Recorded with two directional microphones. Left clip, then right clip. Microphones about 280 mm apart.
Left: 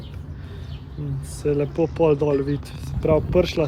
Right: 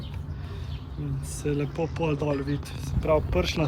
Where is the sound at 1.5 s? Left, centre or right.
Centre.